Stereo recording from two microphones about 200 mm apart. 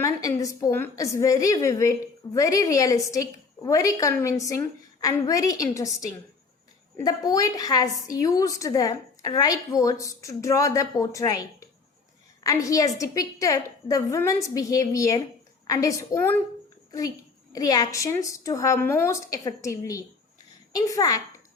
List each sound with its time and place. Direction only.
0.0 s a woman's voice: 15° left (ahead or behind)
17.5 s a woman's voice: 15° left (ahead or behind)